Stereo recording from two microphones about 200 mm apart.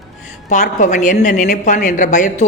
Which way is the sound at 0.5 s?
40° left (ahead or behind).